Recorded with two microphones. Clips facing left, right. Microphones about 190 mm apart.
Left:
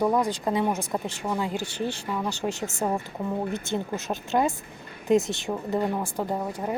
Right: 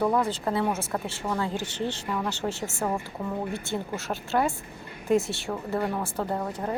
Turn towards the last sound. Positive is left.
turn(degrees=10)  # may be behind; listen again after turning